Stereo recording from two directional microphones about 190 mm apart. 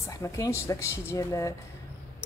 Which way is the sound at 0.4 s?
15° left (ahead or behind).